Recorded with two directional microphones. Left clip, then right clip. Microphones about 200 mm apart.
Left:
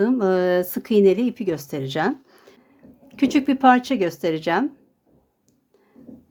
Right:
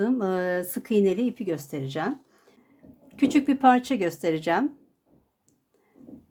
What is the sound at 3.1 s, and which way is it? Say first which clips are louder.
Speech: left 3 dB; 15° left (ahead or behind).